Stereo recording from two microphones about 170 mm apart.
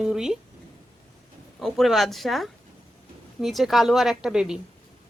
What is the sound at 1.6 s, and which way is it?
A man's voice, centre (ahead or behind).